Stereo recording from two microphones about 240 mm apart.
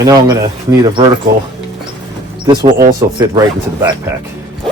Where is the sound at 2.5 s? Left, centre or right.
Centre.